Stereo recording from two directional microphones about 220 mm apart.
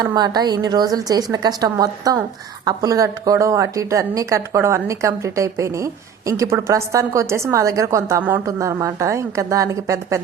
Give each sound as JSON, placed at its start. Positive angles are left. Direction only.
{"t": 0.0, "sound": "a woman's voice", "side_deg": -20}